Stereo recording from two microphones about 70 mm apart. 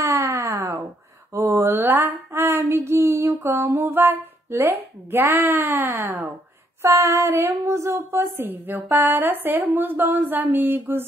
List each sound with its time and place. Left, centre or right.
0.0 s a sound: right
1.3 s female singing: right
6.8 s female singing: right
7.6 s speech: right